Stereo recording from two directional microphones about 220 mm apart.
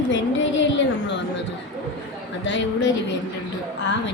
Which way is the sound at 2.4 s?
55° left (ahead or behind).